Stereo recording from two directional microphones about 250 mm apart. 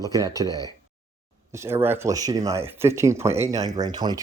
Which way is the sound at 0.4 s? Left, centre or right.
Centre.